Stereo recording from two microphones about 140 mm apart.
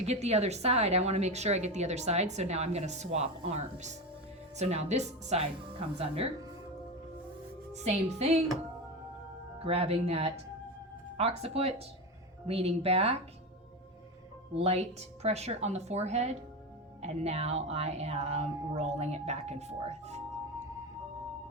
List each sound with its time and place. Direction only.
0.0 s a woman's voice: 50° right (ahead or behind)
7.7 s a woman's voice: 55° right (ahead or behind)
9.6 s a woman's voice: 45° right (ahead or behind)
14.5 s a woman's voice: 45° right (ahead or behind)